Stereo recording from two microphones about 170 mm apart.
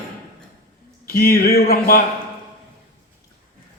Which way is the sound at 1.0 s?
60° left (ahead or behind).